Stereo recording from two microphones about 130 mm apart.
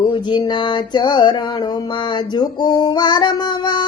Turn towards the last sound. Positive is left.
turn(degrees=35)  # may be behind; listen again after turning